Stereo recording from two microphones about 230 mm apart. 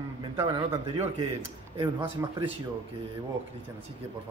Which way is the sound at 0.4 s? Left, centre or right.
Right.